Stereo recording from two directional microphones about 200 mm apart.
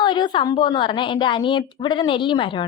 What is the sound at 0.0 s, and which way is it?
A woman's voice, 20° left (ahead or behind).